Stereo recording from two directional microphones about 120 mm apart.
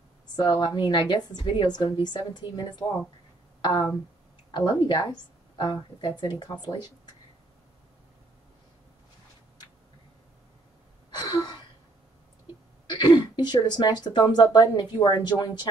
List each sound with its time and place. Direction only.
0.4 s speech: 40° left (ahead or behind)
2.8 s speech: 25° left (ahead or behind)
3.6 s speech: 35° left (ahead or behind)
11.1 s gasp: 35° left (ahead or behind)
12.8 s speech: 35° left (ahead or behind)